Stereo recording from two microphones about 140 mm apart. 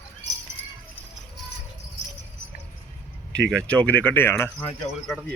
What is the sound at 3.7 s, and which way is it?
Speech, 10° left (ahead or behind).